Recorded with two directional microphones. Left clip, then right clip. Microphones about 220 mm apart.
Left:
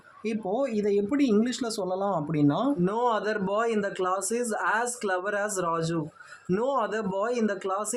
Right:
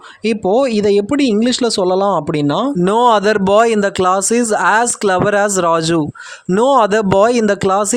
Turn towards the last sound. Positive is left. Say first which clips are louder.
# right 15 dB
turn(degrees=-40)  # may be behind; listen again after turning